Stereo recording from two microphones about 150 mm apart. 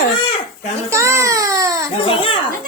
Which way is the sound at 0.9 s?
20° right (ahead or behind).